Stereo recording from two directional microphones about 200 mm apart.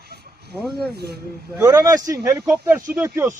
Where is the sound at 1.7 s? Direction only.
15° right (ahead or behind).